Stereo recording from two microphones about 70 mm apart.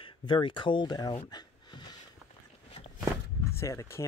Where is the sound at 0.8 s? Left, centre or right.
Left.